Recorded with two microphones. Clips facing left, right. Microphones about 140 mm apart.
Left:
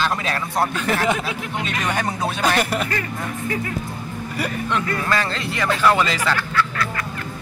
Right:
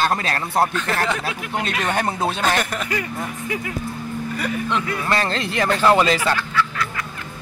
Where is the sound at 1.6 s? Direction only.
35° right (ahead or behind).